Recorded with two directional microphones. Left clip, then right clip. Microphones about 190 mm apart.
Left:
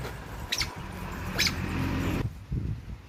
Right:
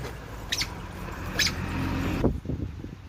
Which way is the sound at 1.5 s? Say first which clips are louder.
Right 1 dB; 35° right (ahead or behind).